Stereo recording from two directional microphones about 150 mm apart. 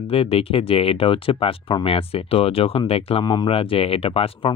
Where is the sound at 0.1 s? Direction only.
40° left (ahead or behind).